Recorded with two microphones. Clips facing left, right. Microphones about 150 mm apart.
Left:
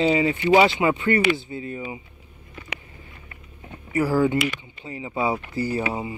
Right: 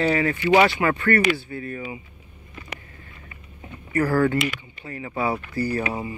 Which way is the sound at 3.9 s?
10° left (ahead or behind).